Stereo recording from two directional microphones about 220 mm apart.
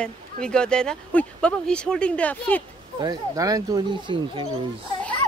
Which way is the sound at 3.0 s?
15° right (ahead or behind).